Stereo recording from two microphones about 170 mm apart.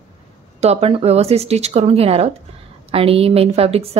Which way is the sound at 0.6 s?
35° right (ahead or behind).